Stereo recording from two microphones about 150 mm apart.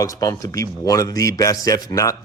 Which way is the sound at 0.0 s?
20° left (ahead or behind).